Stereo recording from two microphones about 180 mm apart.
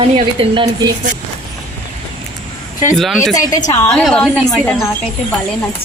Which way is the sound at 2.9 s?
Centre (ahead or behind).